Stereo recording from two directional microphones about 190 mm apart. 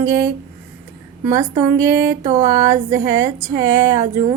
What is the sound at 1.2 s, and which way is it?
A woman's voice, 15° right (ahead or behind).